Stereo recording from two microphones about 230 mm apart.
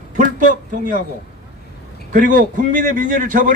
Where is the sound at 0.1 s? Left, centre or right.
Right.